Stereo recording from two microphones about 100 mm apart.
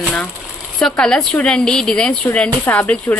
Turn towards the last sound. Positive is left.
turn(degrees=15)  # may be behind; listen again after turning